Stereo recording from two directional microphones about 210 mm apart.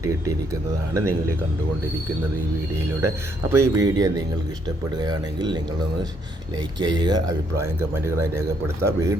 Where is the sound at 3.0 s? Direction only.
15° right (ahead or behind).